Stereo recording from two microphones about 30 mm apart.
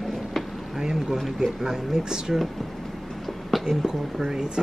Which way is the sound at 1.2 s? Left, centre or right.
Centre.